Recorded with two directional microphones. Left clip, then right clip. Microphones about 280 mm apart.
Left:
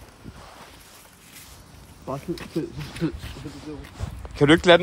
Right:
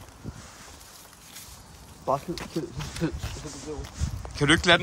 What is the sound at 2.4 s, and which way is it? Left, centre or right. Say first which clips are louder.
Speech: left 3 dB; right.